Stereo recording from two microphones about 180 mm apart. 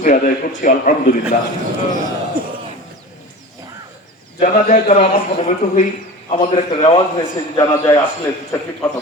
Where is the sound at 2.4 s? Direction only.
55° right (ahead or behind).